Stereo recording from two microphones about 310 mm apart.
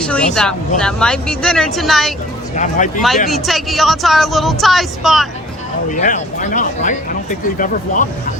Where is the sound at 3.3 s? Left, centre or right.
Centre.